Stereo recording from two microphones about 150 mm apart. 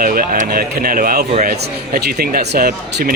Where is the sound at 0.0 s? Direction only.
75° right (ahead or behind).